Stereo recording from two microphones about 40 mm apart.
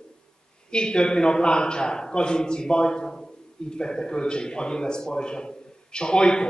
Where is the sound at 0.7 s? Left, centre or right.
Left.